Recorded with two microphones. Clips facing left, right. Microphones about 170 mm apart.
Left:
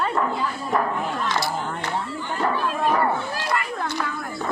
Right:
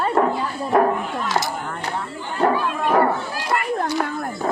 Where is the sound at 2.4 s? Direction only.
50° right (ahead or behind).